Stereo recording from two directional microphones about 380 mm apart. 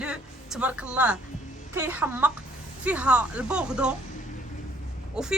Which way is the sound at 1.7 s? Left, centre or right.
Centre.